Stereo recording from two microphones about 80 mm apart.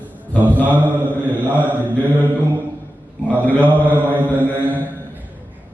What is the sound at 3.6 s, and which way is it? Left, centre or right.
Mantra, right.